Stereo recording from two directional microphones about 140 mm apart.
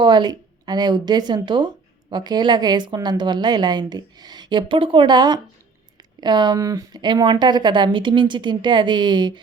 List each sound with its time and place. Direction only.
0.0 s speech: 30° right (ahead or behind)